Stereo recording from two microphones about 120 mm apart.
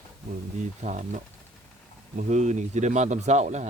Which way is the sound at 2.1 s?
80° right.